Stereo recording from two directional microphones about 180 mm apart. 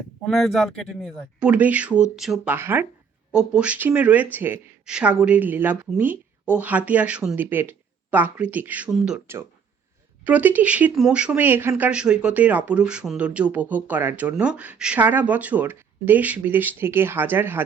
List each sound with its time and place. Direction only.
0.3 s speech: centre (ahead or behind)